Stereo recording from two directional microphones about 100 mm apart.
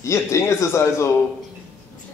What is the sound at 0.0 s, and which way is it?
Speech, 30° left (ahead or behind).